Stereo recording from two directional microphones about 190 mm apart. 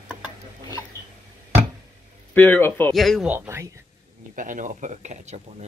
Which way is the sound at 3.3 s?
15° right (ahead or behind).